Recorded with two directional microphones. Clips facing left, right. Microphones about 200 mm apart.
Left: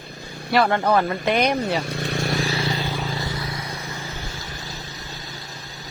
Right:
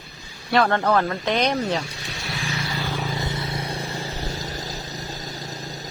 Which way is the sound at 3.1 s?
20° right (ahead or behind).